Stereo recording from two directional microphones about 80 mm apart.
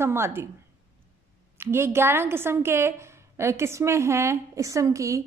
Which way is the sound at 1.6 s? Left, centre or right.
Right.